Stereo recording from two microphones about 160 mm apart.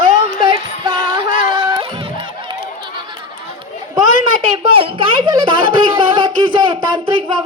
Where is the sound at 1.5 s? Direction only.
30° right (ahead or behind).